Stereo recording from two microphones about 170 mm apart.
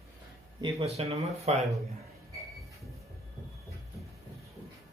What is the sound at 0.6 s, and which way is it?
Speech, 35° right (ahead or behind).